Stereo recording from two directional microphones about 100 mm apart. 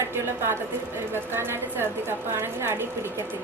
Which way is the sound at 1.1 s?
25° right (ahead or behind).